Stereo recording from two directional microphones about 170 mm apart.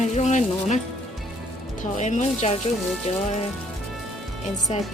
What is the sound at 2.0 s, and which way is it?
Speech, 45° left (ahead or behind).